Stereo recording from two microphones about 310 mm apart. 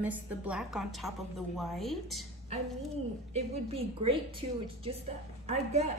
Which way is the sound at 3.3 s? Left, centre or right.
Centre.